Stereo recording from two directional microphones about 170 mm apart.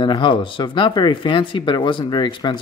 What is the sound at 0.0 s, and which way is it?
Speech, 30° left (ahead or behind).